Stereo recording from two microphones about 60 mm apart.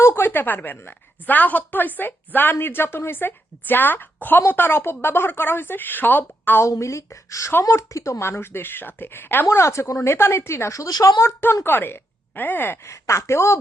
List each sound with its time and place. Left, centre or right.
0.0 s a woman's voice: left
6.7 s speech: left
8.2 s a woman's voice: left
9.5 s a woman's voice: left
10.8 s speech: left
11.6 s a woman's voice: left
12.8 s a woman's voice: left